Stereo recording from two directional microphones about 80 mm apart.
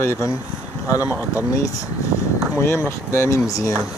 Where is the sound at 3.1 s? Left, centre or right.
Left.